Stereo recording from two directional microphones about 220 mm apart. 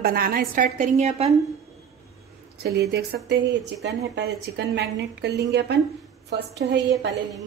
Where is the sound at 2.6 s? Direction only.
50° right (ahead or behind).